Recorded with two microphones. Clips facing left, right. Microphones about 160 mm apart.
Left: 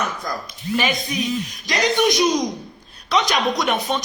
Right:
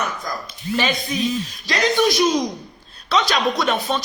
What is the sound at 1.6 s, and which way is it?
A man's voice, 20° left (ahead or behind).